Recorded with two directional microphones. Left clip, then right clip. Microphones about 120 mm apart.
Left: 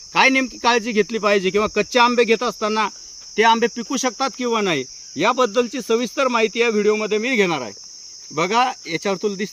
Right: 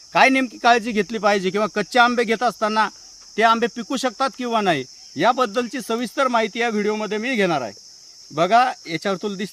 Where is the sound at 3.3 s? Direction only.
30° right (ahead or behind).